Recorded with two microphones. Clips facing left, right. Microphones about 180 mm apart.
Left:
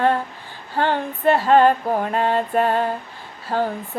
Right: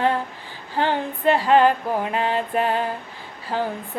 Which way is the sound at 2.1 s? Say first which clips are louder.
Left 4 dB; 45° left (ahead or behind).